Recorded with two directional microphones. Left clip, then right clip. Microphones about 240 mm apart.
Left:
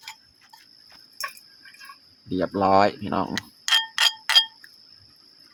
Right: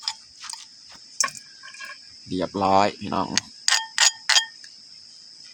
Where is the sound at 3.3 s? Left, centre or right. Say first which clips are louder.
Left 1 dB; centre.